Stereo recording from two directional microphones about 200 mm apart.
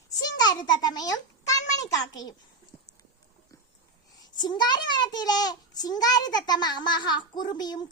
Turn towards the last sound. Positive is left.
turn(degrees=20)  # may be behind; listen again after turning